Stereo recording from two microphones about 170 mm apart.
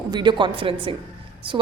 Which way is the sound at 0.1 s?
25° right (ahead or behind).